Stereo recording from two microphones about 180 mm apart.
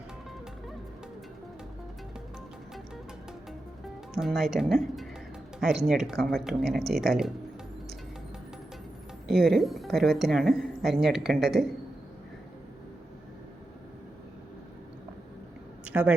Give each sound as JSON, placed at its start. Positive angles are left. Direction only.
{"t": 4.1, "sound": "speech", "side_deg": 0}
{"t": 9.2, "sound": "speech", "side_deg": 0}
{"t": 15.9, "sound": "a woman's voice", "side_deg": -5}